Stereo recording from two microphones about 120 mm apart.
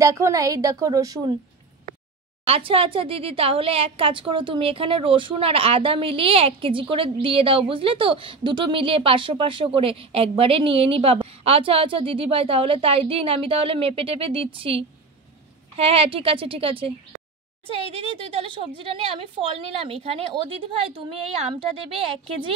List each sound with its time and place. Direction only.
0.0 s a woman's voice: 25° right (ahead or behind)
2.4 s speech: 50° right (ahead or behind)